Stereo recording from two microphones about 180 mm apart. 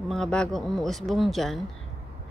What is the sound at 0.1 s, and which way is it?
Speech, 5° left (ahead or behind).